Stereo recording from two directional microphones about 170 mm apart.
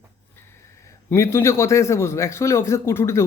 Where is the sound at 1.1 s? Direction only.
15° left (ahead or behind).